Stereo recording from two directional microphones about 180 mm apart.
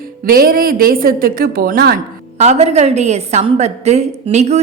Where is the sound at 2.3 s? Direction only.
40° right (ahead or behind).